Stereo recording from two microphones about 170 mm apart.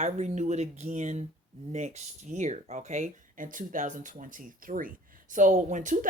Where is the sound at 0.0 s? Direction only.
45° right (ahead or behind).